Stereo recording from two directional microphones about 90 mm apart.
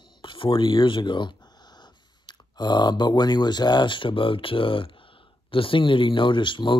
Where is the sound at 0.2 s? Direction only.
75° left (ahead or behind).